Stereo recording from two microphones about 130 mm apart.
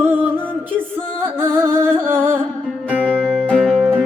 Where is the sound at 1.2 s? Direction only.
15° right (ahead or behind).